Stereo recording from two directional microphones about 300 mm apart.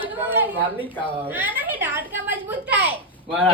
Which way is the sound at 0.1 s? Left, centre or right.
Centre.